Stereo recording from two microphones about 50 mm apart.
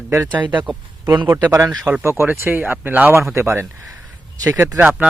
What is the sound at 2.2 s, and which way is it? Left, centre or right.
Speech, right.